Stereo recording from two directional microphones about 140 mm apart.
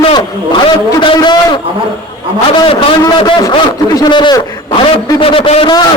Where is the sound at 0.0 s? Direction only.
35° left (ahead or behind).